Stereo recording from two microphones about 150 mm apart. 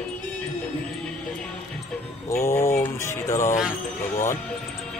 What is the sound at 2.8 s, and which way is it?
Music, 20° left (ahead or behind).